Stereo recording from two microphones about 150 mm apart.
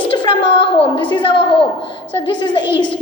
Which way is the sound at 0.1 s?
35° left (ahead or behind).